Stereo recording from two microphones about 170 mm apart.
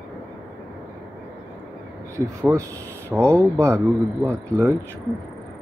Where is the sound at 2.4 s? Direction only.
15° right (ahead or behind).